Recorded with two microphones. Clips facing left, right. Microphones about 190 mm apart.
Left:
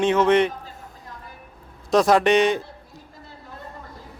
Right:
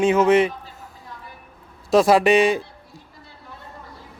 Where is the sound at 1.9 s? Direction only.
5° right (ahead or behind).